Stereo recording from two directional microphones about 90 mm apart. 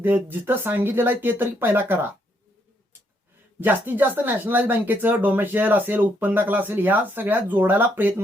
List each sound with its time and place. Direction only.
0.0 s speech: 20° right (ahead or behind)
3.6 s speech: 20° right (ahead or behind)